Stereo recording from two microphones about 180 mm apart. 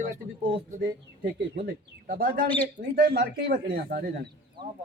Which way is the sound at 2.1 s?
50° right (ahead or behind).